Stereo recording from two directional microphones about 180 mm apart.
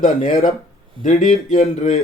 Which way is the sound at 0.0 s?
40° left (ahead or behind).